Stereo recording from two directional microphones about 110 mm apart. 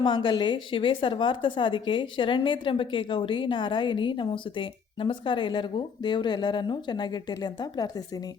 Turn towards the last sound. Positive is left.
turn(degrees=40)  # may be behind; listen again after turning